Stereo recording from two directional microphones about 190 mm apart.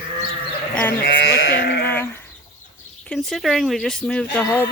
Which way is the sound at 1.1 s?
80° left.